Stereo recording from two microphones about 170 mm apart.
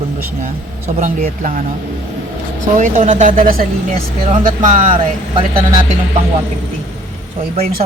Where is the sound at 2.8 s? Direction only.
50° right (ahead or behind).